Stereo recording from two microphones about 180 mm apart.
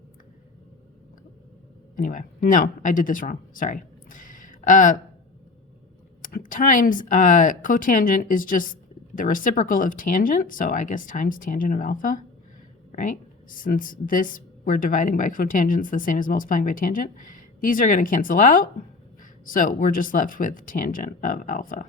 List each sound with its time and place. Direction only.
2.0 s speech: 50° left (ahead or behind)
6.2 s speech: 50° left (ahead or behind)